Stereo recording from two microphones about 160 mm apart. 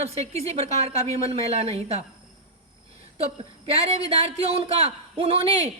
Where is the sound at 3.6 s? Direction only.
40° right (ahead or behind).